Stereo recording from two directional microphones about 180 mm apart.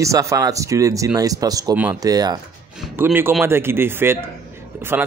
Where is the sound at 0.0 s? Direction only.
15° right (ahead or behind).